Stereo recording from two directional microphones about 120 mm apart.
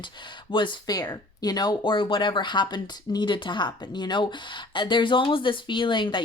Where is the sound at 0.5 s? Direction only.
40° left (ahead or behind).